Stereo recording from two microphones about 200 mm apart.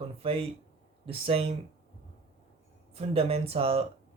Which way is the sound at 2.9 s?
30° right (ahead or behind).